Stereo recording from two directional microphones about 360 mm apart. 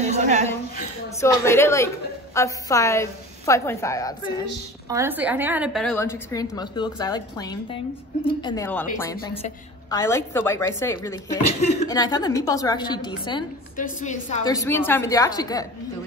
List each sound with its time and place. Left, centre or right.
0.0 s a sound: centre
1.2 s a woman's voice: centre
4.8 s a woman's voice: centre